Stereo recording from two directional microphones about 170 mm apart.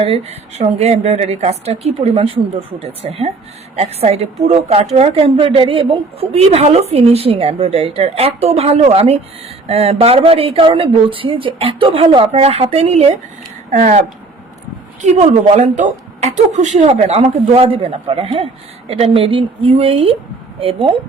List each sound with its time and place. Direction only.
0.0 s a woman's voice: 35° right (ahead or behind)
15.0 s a woman's voice: 40° right (ahead or behind)